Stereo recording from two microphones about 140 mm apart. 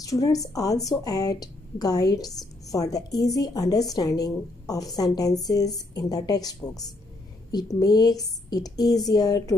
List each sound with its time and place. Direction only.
0.0 s a woman's voice: 25° left (ahead or behind)
7.8 s a woman's voice: 30° left (ahead or behind)